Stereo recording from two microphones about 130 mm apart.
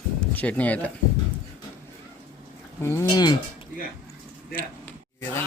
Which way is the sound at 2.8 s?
20° left (ahead or behind).